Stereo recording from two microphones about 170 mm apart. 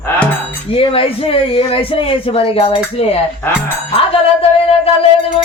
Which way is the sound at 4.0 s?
35° left (ahead or behind).